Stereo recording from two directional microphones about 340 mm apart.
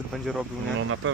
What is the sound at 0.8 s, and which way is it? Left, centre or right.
Speech, right.